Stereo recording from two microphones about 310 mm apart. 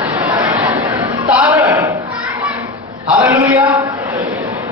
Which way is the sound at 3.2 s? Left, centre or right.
Centre.